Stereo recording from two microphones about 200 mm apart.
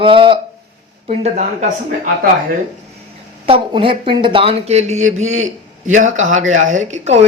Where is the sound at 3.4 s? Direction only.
25° right (ahead or behind).